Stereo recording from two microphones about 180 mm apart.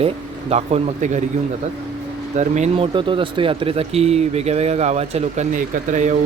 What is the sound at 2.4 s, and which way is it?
Speech, 40° right (ahead or behind).